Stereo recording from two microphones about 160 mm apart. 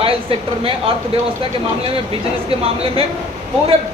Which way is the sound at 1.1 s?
40° right (ahead or behind).